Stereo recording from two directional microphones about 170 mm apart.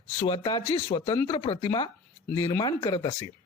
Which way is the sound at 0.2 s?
30° left (ahead or behind).